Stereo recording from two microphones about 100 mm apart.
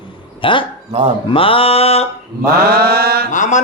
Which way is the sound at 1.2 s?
65° left (ahead or behind).